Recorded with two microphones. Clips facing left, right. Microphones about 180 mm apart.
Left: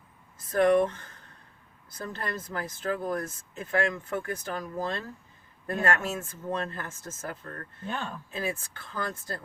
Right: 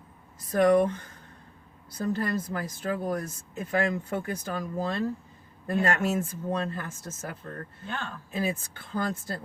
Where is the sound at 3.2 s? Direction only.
15° right (ahead or behind).